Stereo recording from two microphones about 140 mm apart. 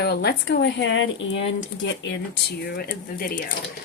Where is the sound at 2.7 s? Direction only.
85° left.